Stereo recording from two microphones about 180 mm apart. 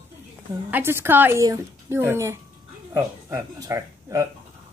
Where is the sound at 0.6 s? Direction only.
10° right (ahead or behind).